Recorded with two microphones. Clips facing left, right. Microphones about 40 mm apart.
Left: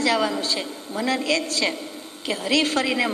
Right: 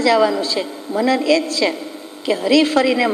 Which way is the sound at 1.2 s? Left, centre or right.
Right.